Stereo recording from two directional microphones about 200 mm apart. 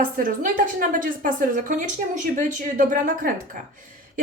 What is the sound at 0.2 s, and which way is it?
A woman's voice, 40° right (ahead or behind).